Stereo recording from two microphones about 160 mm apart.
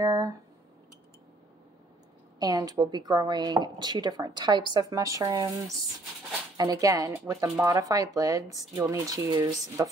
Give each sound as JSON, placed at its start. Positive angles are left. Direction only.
{"t": 0.0, "sound": "speech", "side_deg": -20}
{"t": 2.3, "sound": "speech", "side_deg": -25}